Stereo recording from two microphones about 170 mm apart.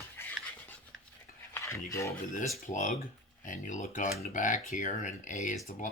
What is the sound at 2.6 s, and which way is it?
Speech, 50° left (ahead or behind).